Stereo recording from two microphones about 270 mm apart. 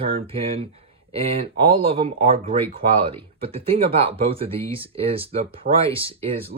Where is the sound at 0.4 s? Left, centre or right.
Right.